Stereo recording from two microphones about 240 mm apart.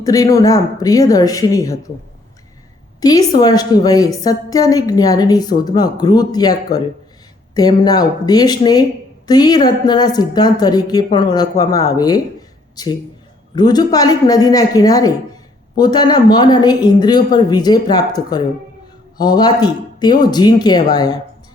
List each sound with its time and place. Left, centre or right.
0.0 s speech: centre
3.0 s speech: centre